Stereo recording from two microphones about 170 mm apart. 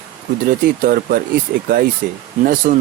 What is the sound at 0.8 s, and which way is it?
Speech, 60° right (ahead or behind).